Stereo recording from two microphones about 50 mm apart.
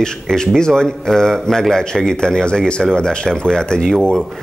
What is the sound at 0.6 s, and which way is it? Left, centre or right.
A man's voice, centre.